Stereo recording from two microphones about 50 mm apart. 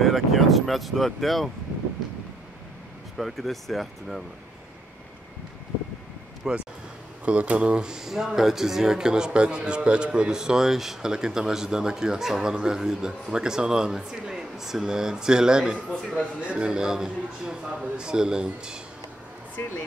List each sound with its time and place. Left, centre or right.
0.0 s speech: centre
3.2 s speech: centre
6.4 s speech: centre
7.2 s speech: right
19.6 s speech: left